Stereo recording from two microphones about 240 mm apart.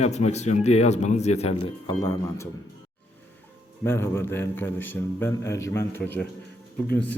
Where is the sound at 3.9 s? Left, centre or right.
Centre.